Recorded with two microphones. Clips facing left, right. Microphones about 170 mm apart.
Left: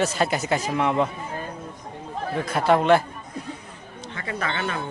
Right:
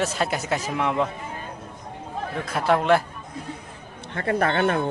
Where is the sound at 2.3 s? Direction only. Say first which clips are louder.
Left 2 dB; centre (ahead or behind).